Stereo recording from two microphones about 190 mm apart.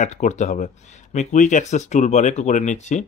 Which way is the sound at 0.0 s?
40° left (ahead or behind).